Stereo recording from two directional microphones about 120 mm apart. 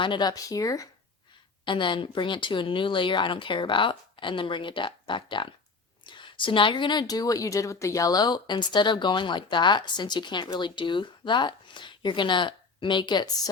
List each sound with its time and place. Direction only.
0.0 s a woman's voice: 40° left (ahead or behind)
1.6 s a woman's voice: 45° left (ahead or behind)